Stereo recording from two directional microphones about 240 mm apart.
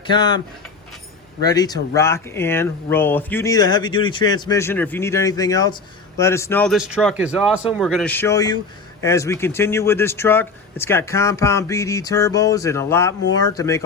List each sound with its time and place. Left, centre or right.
0.1 s speech: centre